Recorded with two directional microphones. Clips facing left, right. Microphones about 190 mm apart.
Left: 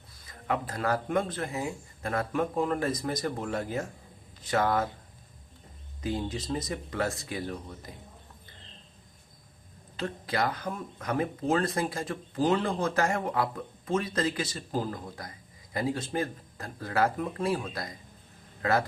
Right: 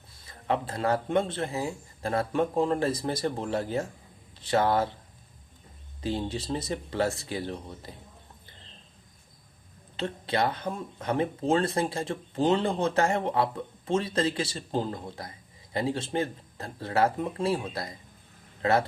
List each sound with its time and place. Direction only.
0.1 s speech: 30° right (ahead or behind)
6.0 s speech: 30° right (ahead or behind)
10.0 s speech: 25° right (ahead or behind)